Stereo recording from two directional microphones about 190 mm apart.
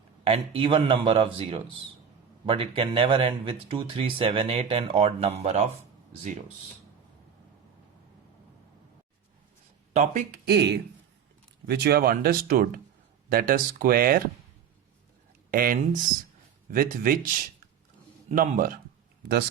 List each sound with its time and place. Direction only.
0.3 s speech: 30° right (ahead or behind)
9.9 s speech: 35° right (ahead or behind)
10.4 s speech: 60° right (ahead or behind)
15.4 s speech: 50° right (ahead or behind)
18.3 s speech: 45° right (ahead or behind)